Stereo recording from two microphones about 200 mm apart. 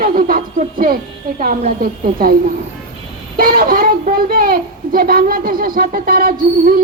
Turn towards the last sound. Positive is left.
turn(degrees=-45)  # may be behind; listen again after turning